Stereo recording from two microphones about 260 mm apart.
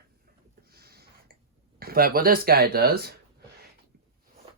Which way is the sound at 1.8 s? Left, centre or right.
Right.